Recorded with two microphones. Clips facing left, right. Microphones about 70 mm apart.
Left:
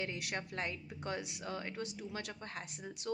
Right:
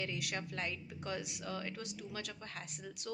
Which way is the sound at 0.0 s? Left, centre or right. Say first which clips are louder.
Even; left.